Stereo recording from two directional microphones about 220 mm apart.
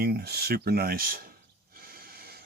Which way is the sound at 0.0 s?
45° right (ahead or behind).